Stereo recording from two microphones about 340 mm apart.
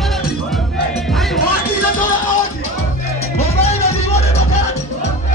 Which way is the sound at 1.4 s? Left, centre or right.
Left.